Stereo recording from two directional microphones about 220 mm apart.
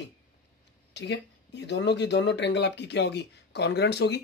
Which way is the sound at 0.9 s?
50° left (ahead or behind).